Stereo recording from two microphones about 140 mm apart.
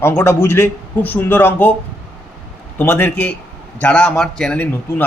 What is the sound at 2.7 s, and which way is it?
A man's voice, 15° left (ahead or behind).